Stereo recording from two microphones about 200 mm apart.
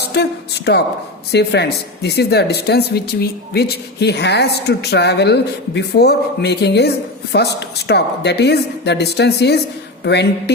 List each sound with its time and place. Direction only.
0.0 s speech: 55° left (ahead or behind)